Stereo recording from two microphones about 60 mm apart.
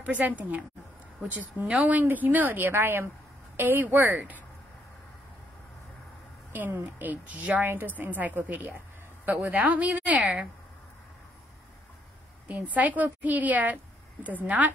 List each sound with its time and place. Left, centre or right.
0.0 s a woman's voice: right
1.7 s a woman's voice: right
6.5 s a woman's voice: right
12.6 s a woman's voice: right